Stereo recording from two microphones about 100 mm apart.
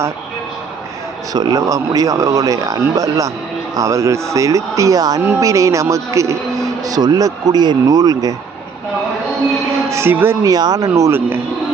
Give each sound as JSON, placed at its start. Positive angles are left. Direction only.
{"t": 1.3, "sound": "speech", "side_deg": -40}
{"t": 9.9, "sound": "speech", "side_deg": -25}
{"t": 10.4, "sound": "speech", "side_deg": -40}